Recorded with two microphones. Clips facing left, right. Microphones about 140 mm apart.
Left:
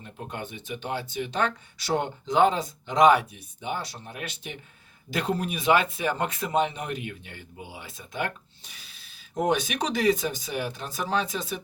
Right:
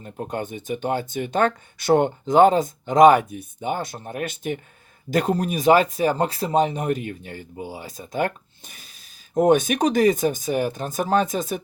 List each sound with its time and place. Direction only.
0.0 s speech: 45° right (ahead or behind)